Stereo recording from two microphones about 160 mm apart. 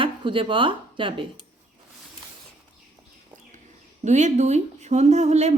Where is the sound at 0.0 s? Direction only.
30° right (ahead or behind).